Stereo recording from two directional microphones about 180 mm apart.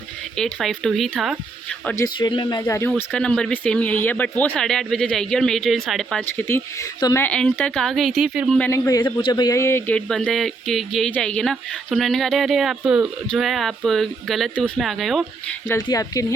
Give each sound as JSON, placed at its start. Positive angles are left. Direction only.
{"t": 0.3, "sound": "a woman's voice", "side_deg": 5}
{"t": 2.1, "sound": "speech", "side_deg": 25}
{"t": 2.9, "sound": "a woman's voice", "side_deg": 5}
{"t": 15.7, "sound": "speech", "side_deg": 20}